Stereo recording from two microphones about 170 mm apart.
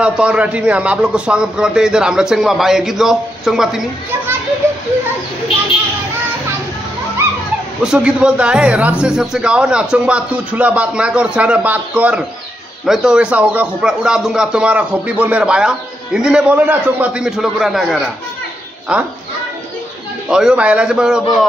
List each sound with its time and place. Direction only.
0.0 s speech: 5° right (ahead or behind)
7.8 s a man's voice: 5° right (ahead or behind)
20.2 s speech: 5° right (ahead or behind)